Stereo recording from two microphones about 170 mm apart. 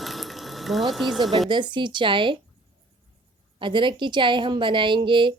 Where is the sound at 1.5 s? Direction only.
25° right (ahead or behind).